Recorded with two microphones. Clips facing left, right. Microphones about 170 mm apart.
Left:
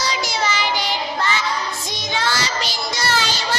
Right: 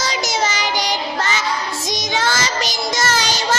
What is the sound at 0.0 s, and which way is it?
Child singing, 45° right (ahead or behind).